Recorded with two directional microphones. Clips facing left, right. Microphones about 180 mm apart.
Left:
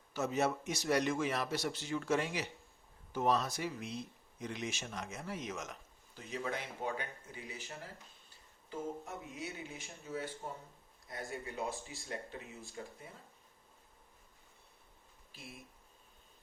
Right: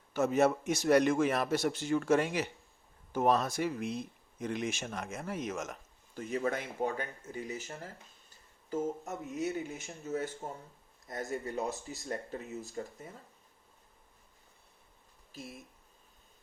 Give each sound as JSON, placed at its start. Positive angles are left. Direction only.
{"t": 0.1, "sound": "speech", "side_deg": -55}
{"t": 15.3, "sound": "speech", "side_deg": -40}